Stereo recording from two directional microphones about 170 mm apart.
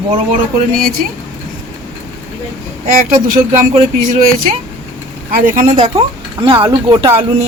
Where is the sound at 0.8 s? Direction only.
60° right (ahead or behind).